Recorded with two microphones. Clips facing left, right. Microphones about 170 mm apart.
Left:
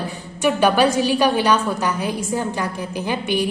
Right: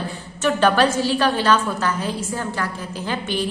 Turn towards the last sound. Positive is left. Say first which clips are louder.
# left 3 dB
turn(degrees=15)  # may be behind; listen again after turning